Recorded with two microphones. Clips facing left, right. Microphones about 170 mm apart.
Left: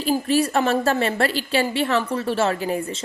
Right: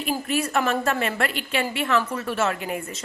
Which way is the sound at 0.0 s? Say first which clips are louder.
Left 5 dB; 35° left (ahead or behind).